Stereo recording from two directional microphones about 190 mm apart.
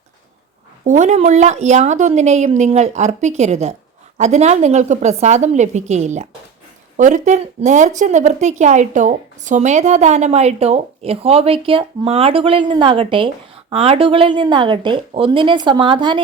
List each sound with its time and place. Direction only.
0.9 s a woman's voice: 40° right (ahead or behind)